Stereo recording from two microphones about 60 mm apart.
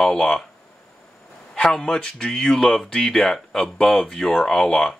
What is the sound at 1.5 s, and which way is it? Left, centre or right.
Speech, centre.